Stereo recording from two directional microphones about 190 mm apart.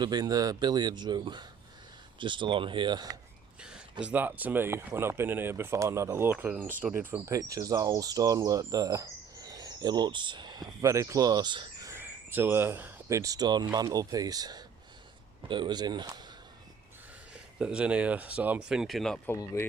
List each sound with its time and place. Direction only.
0.0 s a man's voice: 20° right (ahead or behind)
3.6 s a sound: 5° right (ahead or behind)
4.0 s a man's voice: 10° right (ahead or behind)
17.3 s speech: 5° right (ahead or behind); by 19.6 s 15° left (ahead or behind)